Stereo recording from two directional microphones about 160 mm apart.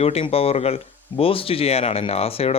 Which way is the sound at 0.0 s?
40° left (ahead or behind).